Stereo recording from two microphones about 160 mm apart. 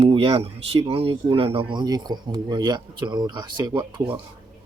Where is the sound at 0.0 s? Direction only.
35° right (ahead or behind).